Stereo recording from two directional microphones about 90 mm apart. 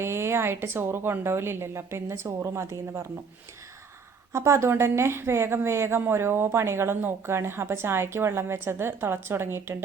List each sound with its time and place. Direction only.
0.0 s speech: 30° right (ahead or behind)
4.3 s speech: 30° right (ahead or behind)